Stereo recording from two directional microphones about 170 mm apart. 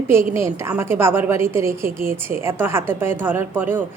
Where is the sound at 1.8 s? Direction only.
55° right (ahead or behind).